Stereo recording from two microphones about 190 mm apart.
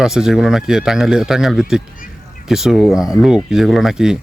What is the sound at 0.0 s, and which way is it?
Speech, 5° right (ahead or behind).